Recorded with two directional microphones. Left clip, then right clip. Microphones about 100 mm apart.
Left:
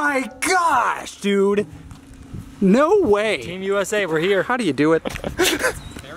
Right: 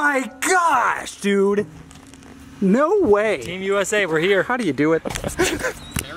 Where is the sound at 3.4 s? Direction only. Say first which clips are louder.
Right 1 dB; centre (ahead or behind).